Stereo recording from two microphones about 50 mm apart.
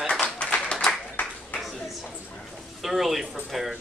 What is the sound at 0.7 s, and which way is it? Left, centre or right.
Applause, centre.